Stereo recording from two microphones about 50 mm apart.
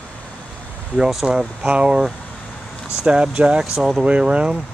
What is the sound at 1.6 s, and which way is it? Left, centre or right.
Speech, right.